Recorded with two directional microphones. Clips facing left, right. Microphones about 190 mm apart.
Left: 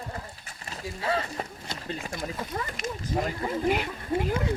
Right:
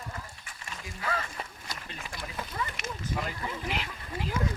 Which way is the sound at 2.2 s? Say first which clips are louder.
Left 4 dB; 40° left (ahead or behind).